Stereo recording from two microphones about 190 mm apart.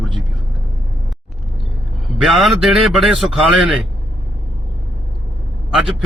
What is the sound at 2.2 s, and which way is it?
Speech, centre (ahead or behind).